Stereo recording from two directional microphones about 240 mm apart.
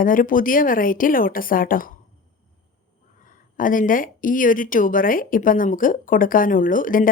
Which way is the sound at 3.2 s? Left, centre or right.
Left.